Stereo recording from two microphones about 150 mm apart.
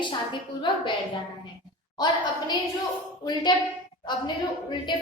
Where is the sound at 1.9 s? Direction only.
30° left (ahead or behind).